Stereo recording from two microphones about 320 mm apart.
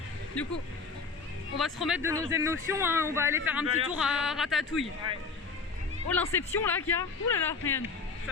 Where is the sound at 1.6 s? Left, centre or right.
Centre.